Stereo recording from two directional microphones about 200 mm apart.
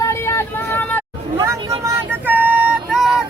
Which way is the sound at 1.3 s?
15° right (ahead or behind).